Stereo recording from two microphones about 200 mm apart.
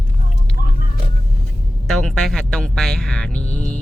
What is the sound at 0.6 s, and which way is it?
Vehicle, 50° right (ahead or behind).